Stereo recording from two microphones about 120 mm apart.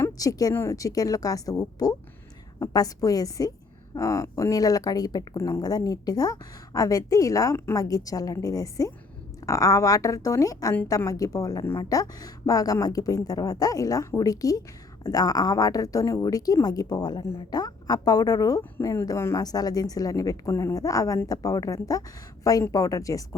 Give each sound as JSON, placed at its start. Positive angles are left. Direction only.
{"t": 0.0, "sound": "a woman's voice", "side_deg": 30}